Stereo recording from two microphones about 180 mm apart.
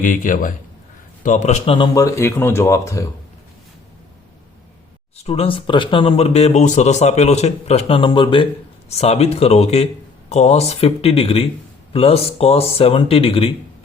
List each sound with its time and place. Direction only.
0.0 s a man's voice: 50° left (ahead or behind)
1.7 s speech: 20° left (ahead or behind)
5.1 s speech: 35° left (ahead or behind)